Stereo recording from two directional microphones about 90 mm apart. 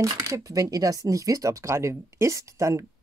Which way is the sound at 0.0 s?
40° right (ahead or behind).